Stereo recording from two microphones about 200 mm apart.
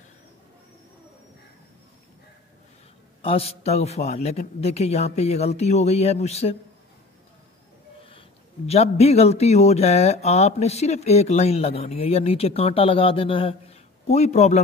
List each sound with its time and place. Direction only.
3.2 s speech: 30° left (ahead or behind)
8.6 s speech: 30° left (ahead or behind)